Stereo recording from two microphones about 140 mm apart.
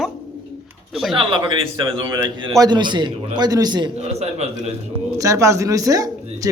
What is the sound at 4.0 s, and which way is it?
Speech, 50° right (ahead or behind).